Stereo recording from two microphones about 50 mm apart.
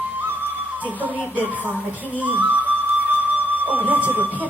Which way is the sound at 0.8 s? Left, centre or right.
Left.